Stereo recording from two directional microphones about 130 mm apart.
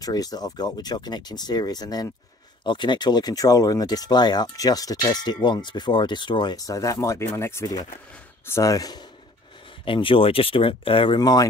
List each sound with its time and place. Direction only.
0.0 s speech: 30° left (ahead or behind)
9.8 s speech: 40° left (ahead or behind)